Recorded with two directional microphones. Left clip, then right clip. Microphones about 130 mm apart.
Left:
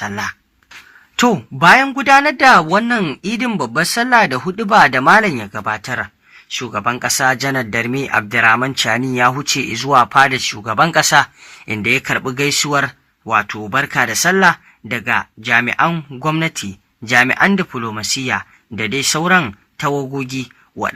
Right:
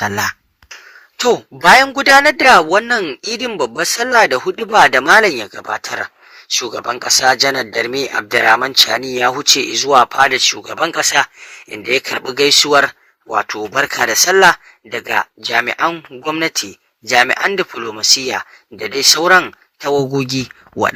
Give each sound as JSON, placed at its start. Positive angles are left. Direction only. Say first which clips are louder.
{"t": 0.0, "sound": "speech", "louder": "right 5 dB", "side_deg": -35}
{"t": 1.5, "sound": "speech", "louder": "right 1 dB", "side_deg": -40}
{"t": 11.9, "sound": "speech", "louder": "left 1 dB", "side_deg": -35}